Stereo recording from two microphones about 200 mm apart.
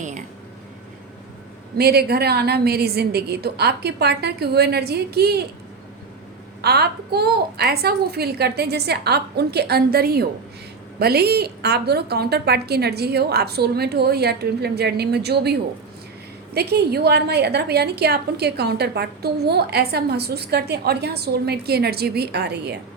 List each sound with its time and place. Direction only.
1.8 s a woman's voice: 50° right (ahead or behind)
6.6 s a woman's voice: 55° right (ahead or behind)
16.6 s a woman's voice: 55° right (ahead or behind)